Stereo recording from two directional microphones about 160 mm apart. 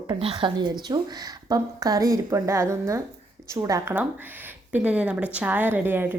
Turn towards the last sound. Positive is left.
turn(degrees=-15)  # may be behind; listen again after turning